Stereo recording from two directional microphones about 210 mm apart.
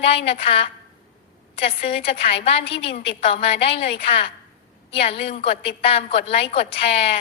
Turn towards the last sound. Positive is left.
turn(degrees=25)  # may be behind; listen again after turning